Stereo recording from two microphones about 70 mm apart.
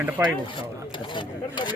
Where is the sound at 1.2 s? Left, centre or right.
Left.